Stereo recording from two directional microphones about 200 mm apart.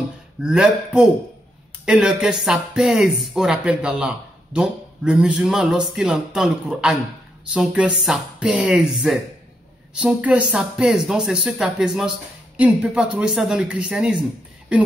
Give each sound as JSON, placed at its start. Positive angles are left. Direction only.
{"t": 0.4, "sound": "speech", "side_deg": -5}